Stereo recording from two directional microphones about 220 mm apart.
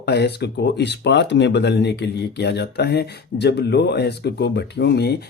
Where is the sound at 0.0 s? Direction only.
50° left (ahead or behind).